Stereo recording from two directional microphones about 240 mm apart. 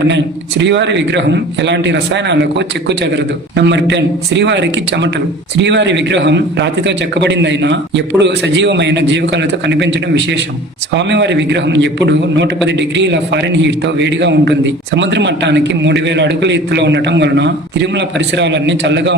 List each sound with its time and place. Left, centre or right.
0.0 s a man's voice: right